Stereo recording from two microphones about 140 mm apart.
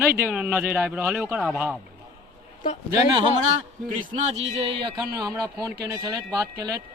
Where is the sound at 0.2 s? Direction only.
10° right (ahead or behind).